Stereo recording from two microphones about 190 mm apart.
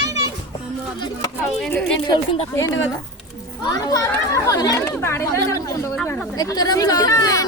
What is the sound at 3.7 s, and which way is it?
Speech, 20° left (ahead or behind).